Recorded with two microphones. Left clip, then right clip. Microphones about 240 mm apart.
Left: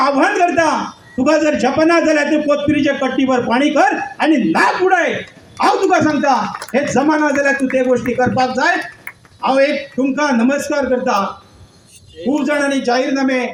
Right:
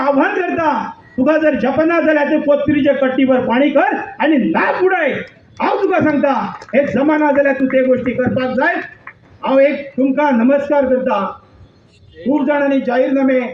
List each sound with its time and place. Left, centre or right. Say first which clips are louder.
0.0 s a sound: left 2 dB; left
1.2 s a man's voice: even; left
12.5 s a man's voice: even; left